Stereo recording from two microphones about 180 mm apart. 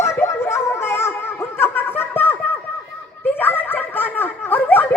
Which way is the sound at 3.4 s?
10° left (ahead or behind).